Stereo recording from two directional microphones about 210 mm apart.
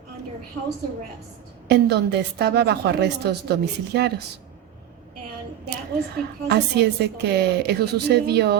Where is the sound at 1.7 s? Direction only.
50° right (ahead or behind).